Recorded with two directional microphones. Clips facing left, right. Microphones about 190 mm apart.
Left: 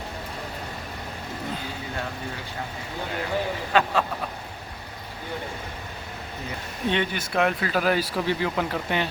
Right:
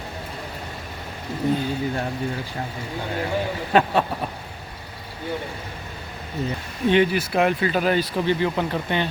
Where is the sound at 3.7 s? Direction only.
30° right (ahead or behind).